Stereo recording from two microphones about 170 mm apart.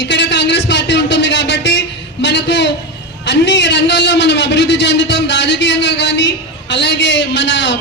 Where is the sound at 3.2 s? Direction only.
90° left.